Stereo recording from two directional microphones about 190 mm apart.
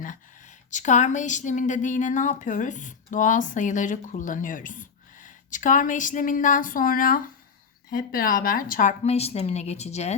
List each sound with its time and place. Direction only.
0.7 s a woman's voice: 40° left (ahead or behind)